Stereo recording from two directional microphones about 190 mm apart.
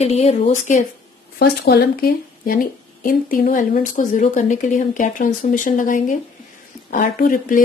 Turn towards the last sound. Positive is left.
turn(degrees=45)  # may be behind; listen again after turning